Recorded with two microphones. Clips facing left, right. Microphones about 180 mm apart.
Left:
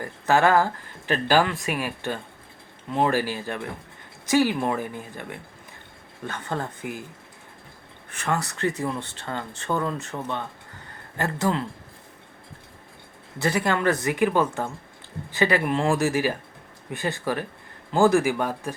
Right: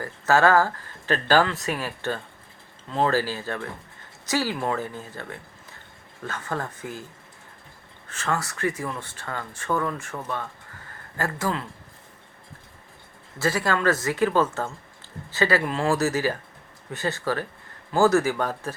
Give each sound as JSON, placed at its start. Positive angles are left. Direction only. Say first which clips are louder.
{"t": 0.0, "sound": "speech", "louder": "even", "side_deg": 15}
{"t": 8.1, "sound": "speech", "louder": "left 1 dB", "side_deg": 15}
{"t": 13.4, "sound": "speech", "louder": "even", "side_deg": 20}